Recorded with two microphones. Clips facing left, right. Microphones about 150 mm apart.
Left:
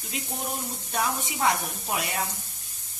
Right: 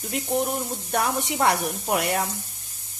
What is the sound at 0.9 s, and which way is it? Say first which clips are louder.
Speech: right 5 dB; 65° right (ahead or behind).